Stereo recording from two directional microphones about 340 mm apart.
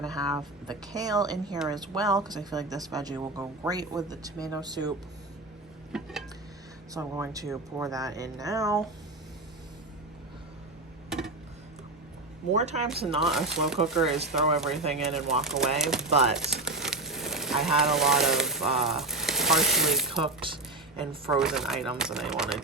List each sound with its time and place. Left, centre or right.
0.0 s speech: centre
12.5 s speech: centre
13.1 s speech: centre
20.4 s speech: centre
21.2 s speech: centre